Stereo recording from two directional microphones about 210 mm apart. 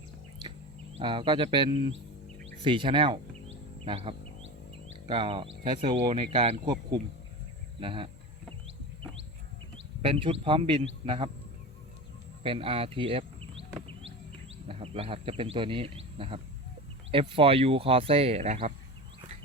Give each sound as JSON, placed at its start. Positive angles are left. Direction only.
{"t": 0.9, "sound": "speech", "side_deg": -25}
{"t": 9.7, "sound": "speech", "side_deg": -25}
{"t": 12.4, "sound": "speech", "side_deg": -25}
{"t": 14.7, "sound": "speech", "side_deg": -25}